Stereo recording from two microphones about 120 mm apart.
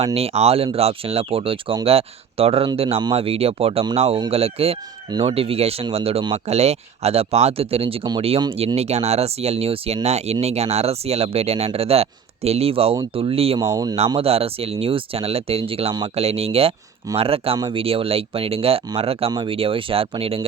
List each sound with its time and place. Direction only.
0.0 s speech: 60° right (ahead or behind)
13.6 s speech: 30° right (ahead or behind)
14.2 s speech: 55° right (ahead or behind)